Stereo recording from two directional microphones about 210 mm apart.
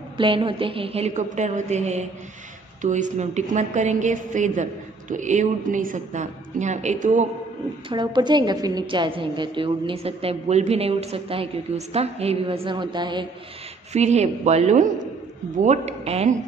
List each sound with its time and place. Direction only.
0.2 s a woman's voice: 25° right (ahead or behind)
7.9 s a woman's voice: 20° right (ahead or behind)
13.9 s a woman's voice: 30° right (ahead or behind)